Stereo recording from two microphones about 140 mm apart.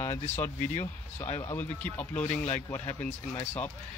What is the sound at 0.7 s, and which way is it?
Speech, 45° left (ahead or behind).